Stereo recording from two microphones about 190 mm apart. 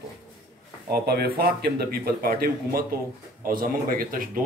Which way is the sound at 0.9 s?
55° right (ahead or behind).